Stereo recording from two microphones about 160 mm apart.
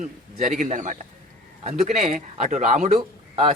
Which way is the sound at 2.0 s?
50° right (ahead or behind).